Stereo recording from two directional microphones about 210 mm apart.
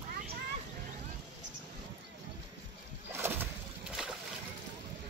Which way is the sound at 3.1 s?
10° right (ahead or behind).